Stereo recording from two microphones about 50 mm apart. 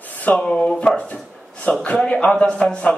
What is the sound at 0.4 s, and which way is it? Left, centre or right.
A man's voice, centre.